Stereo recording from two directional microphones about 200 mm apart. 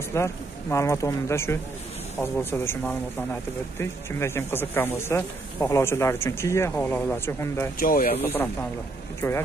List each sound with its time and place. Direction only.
0.1 s speech: 15° left (ahead or behind)
7.8 s speech: 45° left (ahead or behind)
8.2 s speech: 10° left (ahead or behind)